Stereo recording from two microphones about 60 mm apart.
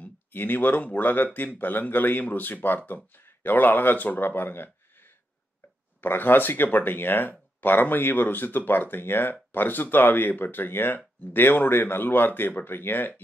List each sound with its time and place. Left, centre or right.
0.0 s speech: left